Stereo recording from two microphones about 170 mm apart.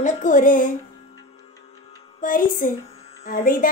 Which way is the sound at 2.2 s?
55° left (ahead or behind).